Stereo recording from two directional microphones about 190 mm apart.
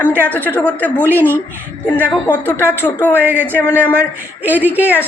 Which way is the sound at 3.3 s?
10° right (ahead or behind).